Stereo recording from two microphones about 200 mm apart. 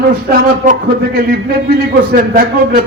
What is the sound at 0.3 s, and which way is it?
A man's voice, 45° right (ahead or behind).